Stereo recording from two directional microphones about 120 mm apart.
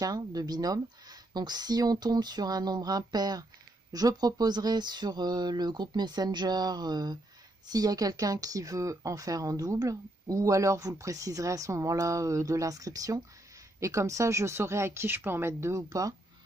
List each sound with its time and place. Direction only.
0.0 s speech: 30° right (ahead or behind)